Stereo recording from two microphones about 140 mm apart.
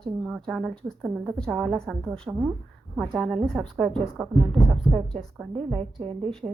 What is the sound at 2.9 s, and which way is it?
A woman's voice, centre (ahead or behind).